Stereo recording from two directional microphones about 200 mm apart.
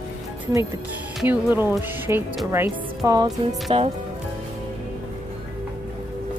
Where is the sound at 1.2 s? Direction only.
10° right (ahead or behind).